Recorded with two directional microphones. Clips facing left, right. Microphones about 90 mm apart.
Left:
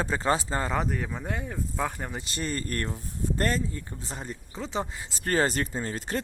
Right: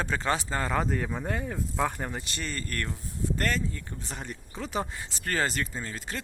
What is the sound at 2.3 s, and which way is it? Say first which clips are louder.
Speech: left 4 dB; 35° left (ahead or behind).